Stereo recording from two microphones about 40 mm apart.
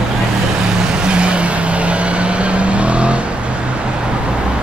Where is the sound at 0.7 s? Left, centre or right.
Centre.